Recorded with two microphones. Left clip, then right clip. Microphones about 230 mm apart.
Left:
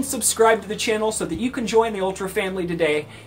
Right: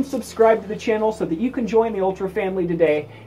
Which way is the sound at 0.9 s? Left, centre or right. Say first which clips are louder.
Right 2 dB; left.